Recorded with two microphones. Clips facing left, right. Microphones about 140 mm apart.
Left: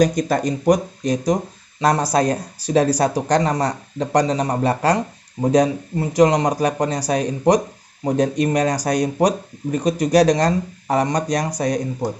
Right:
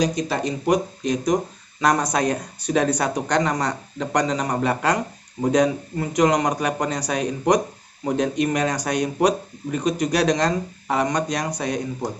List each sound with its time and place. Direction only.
0.0 s speech: 45° left (ahead or behind)